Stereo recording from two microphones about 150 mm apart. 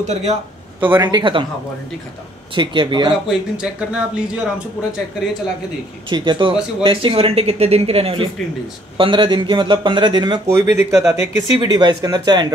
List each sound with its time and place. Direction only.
0.0 s speech: 50° right (ahead or behind)
0.7 s speech: 10° right (ahead or behind)
1.0 s speech: 30° right (ahead or behind)
2.5 s speech: 35° right (ahead or behind)
3.3 s speech: 5° right (ahead or behind)
6.0 s speech: 30° right (ahead or behind)